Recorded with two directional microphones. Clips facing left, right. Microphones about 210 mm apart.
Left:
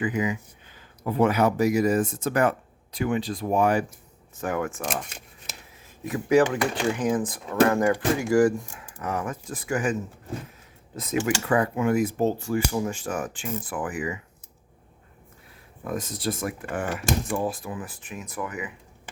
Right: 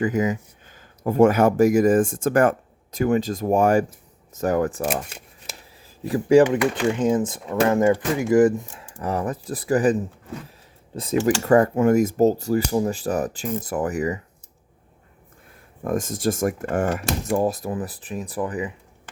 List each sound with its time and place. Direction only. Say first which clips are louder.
0.0 s speech: right 4 dB; 45° right (ahead or behind)
5.8 s speech: right 6 dB; 35° right (ahead or behind)
11.4 s speech: right 8 dB; 45° right (ahead or behind)
15.8 s speech: right 6 dB; 50° right (ahead or behind); by 18.7 s 30° right (ahead or behind)